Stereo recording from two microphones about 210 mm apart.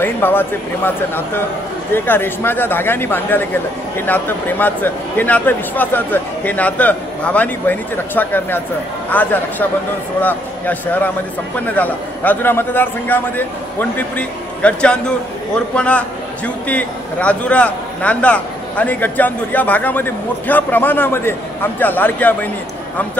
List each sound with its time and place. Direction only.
0.0 s a man's voice: 10° left (ahead or behind)